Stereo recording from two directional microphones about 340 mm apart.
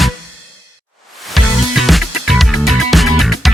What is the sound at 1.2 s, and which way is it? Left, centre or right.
Music, centre.